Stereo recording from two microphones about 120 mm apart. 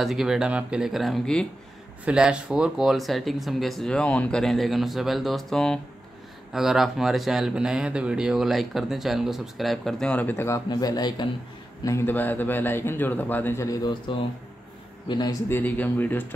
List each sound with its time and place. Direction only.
0.0 s speech: centre (ahead or behind)
2.0 s speech: 5° right (ahead or behind); by 10.6 s 20° left (ahead or behind)
10.7 s a man's voice: 35° left (ahead or behind)
11.8 s a man's voice: 25° left (ahead or behind)
14.1 s a man's voice: 45° left (ahead or behind)
15.4 s a man's voice: 15° left (ahead or behind)